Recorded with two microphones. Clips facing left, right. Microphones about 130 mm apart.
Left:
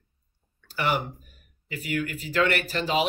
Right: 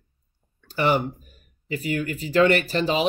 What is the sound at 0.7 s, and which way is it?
Speech, 25° right (ahead or behind).